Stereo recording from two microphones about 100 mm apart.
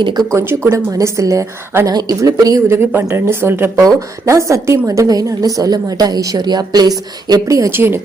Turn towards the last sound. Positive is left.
turn(degrees=-25)  # may be behind; listen again after turning